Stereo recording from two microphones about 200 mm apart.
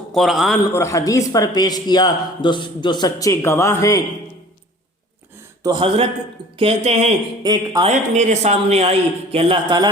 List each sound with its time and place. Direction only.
0.1 s a man's voice: centre (ahead or behind)
0.7 s a man's voice: 15° left (ahead or behind)
5.6 s a man's voice: 25° right (ahead or behind)
7.4 s a man's voice: 20° right (ahead or behind)
7.9 s a man's voice: 35° right (ahead or behind)